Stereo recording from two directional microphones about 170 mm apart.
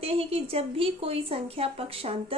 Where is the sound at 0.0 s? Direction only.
35° right (ahead or behind).